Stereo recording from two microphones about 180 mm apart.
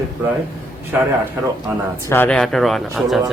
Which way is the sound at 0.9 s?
10° right (ahead or behind).